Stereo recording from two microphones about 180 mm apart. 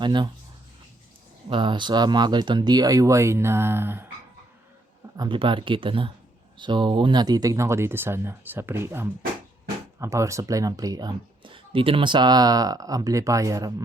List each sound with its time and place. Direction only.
0.0 s speech: 25° right (ahead or behind)
1.5 s speech: 30° right (ahead or behind); by 4.0 s 10° right (ahead or behind)
5.1 s speech: 25° right (ahead or behind)